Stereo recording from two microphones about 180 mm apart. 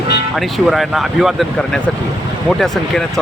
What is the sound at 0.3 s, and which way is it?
Speech, centre (ahead or behind).